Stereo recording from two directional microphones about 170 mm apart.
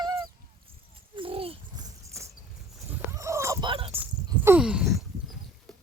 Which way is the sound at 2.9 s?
15° right (ahead or behind).